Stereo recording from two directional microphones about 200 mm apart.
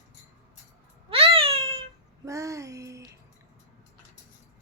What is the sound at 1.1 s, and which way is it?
Cat, 25° right (ahead or behind).